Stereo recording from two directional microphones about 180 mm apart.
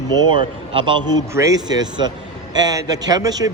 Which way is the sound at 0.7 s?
25° right (ahead or behind).